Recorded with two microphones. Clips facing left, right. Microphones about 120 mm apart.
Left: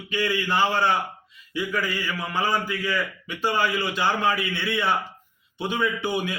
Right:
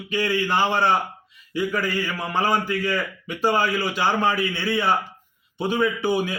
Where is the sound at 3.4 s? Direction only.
40° right (ahead or behind).